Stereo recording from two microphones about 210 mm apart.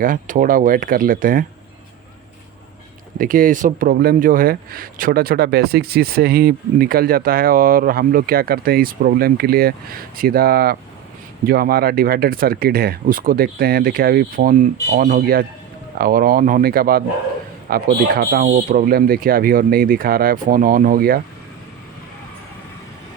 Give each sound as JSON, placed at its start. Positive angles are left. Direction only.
{"t": 0.0, "sound": "speech", "side_deg": -40}
{"t": 3.2, "sound": "speech", "side_deg": -40}